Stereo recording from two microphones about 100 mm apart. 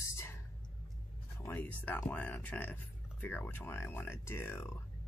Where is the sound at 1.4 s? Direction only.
30° left (ahead or behind).